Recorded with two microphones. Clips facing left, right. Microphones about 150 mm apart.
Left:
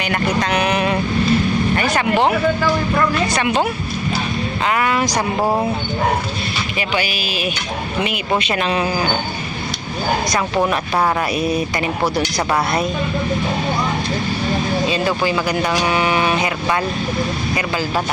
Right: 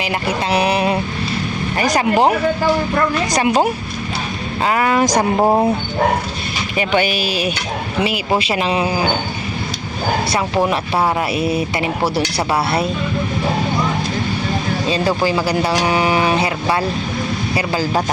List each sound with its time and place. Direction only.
0.1 s speech: 35° right (ahead or behind)
4.7 s speech: 35° right (ahead or behind)
5.4 s speech: 20° right (ahead or behind)
8.0 s speech: 30° right (ahead or behind)
10.7 s speech: 25° right (ahead or behind)
14.8 s speech: 35° right (ahead or behind)